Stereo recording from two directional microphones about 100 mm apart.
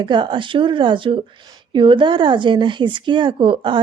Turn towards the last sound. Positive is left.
turn(degrees=-55)  # may be behind; listen again after turning